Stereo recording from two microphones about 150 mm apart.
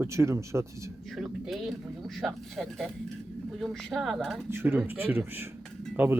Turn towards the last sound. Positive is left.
turn(degrees=-15)  # may be behind; listen again after turning